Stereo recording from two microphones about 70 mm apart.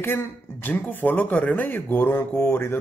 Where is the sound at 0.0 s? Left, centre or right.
Left.